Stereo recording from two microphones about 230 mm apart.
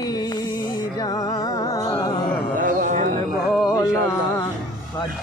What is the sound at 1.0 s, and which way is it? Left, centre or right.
Music, centre.